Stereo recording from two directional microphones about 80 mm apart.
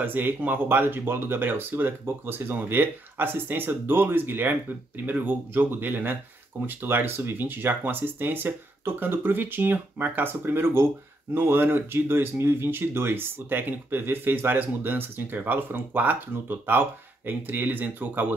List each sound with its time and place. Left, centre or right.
0.0 s speech: right